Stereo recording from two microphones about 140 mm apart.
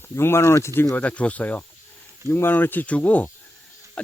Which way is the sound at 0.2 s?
20° left (ahead or behind).